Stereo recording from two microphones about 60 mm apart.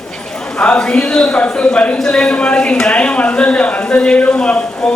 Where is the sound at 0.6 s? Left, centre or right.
Centre.